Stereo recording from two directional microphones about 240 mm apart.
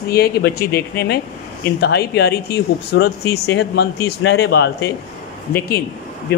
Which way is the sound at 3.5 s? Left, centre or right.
Left.